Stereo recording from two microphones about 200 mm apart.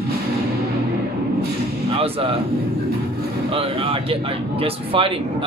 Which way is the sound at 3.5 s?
30° right (ahead or behind).